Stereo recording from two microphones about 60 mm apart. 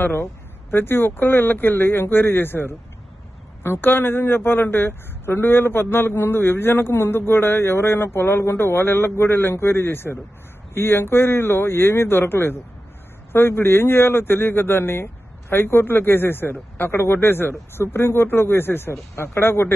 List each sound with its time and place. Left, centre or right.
0.0 s speech: left